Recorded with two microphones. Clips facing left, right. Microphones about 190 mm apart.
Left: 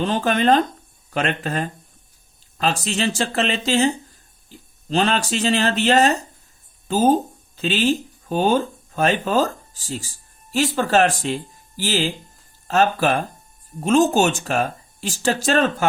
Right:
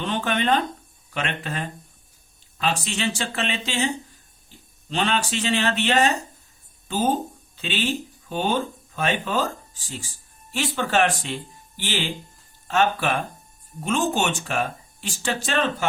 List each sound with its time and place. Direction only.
0.0 s speech: 40° left (ahead or behind)